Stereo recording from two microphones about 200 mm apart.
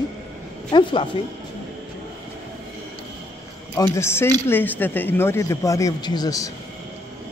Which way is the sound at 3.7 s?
10° left (ahead or behind).